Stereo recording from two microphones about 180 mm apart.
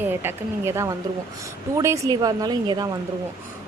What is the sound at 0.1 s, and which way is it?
Speech, 10° right (ahead or behind).